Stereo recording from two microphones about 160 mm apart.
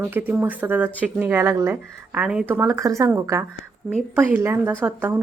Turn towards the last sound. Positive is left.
turn(degrees=-15)  # may be behind; listen again after turning